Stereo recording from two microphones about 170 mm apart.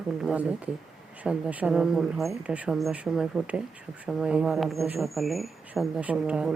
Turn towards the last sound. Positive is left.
turn(degrees=-5)  # may be behind; listen again after turning